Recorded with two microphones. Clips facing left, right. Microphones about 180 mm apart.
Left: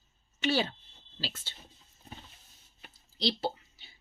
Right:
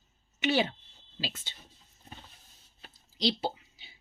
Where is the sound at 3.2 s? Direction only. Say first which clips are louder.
Right 1 dB; 10° right (ahead or behind).